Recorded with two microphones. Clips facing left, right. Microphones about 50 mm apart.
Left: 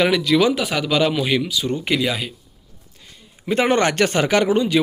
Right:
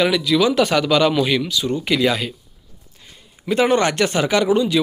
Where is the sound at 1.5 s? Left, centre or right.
Left.